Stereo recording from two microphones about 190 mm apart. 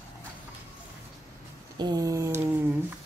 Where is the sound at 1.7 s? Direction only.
20° right (ahead or behind).